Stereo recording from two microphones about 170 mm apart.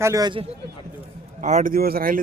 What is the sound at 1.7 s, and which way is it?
Speech, 60° right (ahead or behind).